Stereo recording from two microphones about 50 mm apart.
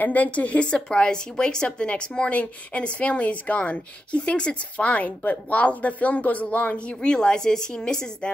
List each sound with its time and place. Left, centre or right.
0.0 s a woman's voice: left
7.0 s speech: centre